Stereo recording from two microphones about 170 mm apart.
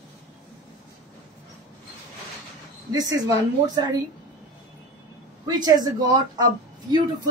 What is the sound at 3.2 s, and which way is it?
Speech, 20° right (ahead or behind).